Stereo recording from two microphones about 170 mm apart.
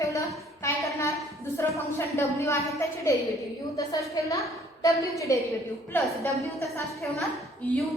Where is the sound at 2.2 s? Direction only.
15° left (ahead or behind).